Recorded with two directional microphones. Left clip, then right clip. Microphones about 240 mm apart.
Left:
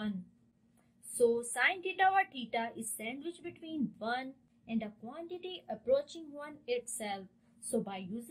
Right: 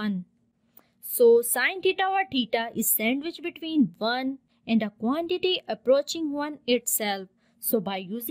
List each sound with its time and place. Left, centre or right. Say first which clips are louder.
1.1 s a woman's voice: right 12 dB; right